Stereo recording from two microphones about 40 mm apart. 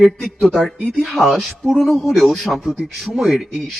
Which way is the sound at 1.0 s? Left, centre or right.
Centre.